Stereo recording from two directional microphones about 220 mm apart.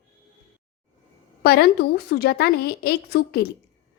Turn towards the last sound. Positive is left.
turn(degrees=45)  # may be behind; listen again after turning